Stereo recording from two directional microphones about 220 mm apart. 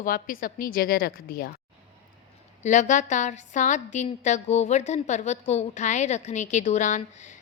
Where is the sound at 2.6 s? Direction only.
35° left (ahead or behind).